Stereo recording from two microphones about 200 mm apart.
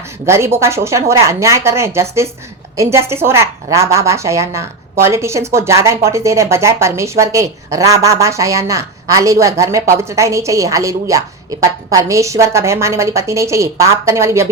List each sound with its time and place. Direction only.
0.3 s a woman's voice: 15° right (ahead or behind)